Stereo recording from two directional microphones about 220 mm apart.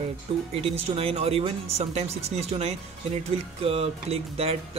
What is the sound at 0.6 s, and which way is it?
Speech, 25° right (ahead or behind).